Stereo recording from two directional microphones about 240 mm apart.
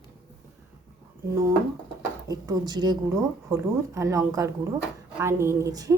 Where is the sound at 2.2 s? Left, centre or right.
Centre.